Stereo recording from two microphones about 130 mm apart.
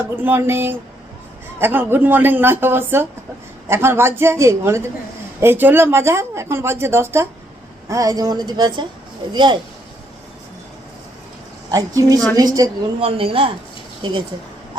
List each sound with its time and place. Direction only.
0.2 s a woman's voice: 15° right (ahead or behind); by 9.6 s 35° right (ahead or behind)
11.7 s speech: 25° right (ahead or behind)
13.0 s speech: 45° right (ahead or behind)